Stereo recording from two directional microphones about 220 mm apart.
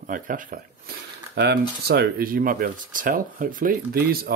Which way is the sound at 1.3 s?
50° right (ahead or behind).